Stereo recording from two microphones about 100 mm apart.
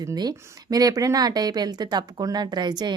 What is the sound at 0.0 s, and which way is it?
Speech, 40° right (ahead or behind).